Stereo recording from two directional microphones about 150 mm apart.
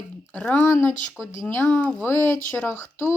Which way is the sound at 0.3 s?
5° left (ahead or behind).